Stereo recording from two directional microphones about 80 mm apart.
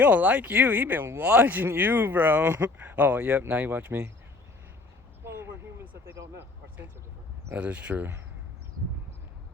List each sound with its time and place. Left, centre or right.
0.0 s speech: centre
5.2 s vehicle: right
6.1 s speech: right
7.6 s speech: centre